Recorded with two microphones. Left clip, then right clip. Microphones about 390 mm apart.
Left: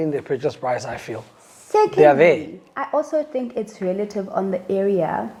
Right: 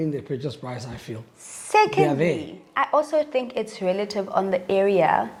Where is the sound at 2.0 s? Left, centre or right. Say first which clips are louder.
Left 10 dB; left.